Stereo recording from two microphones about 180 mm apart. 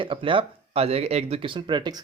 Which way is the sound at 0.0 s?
30° right (ahead or behind).